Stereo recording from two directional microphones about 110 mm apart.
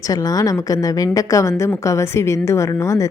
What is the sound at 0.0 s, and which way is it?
A woman's voice, 30° left (ahead or behind).